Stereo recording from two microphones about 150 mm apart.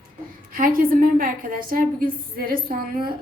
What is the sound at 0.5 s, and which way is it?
A woman's voice, 70° right (ahead or behind).